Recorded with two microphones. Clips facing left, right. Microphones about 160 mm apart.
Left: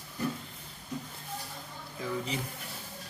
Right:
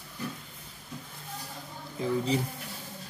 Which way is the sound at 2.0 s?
30° right (ahead or behind).